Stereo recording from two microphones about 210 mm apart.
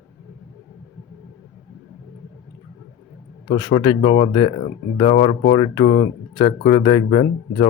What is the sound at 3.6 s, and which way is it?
A man's voice, 20° left (ahead or behind).